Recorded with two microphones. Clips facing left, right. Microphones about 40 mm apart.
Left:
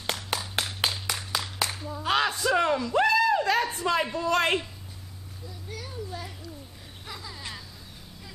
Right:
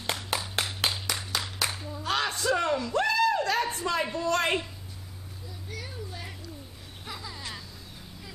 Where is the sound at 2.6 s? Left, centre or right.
Centre.